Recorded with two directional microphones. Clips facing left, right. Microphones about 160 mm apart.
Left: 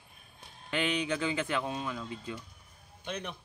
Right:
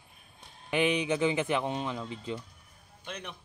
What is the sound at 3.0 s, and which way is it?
Speech, centre (ahead or behind).